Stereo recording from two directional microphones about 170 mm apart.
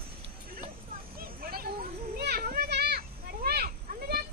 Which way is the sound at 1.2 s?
60° right (ahead or behind).